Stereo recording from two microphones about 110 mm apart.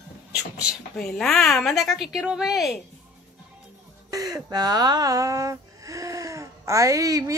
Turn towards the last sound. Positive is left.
turn(degrees=-30)  # may be behind; listen again after turning